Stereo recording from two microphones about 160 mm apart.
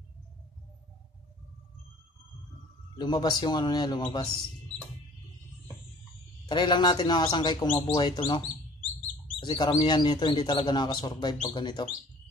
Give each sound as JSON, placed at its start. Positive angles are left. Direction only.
{"t": 3.0, "sound": "speech", "side_deg": 25}
{"t": 6.5, "sound": "speech", "side_deg": 30}